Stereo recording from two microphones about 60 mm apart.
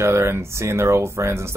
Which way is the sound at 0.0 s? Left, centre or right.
Right.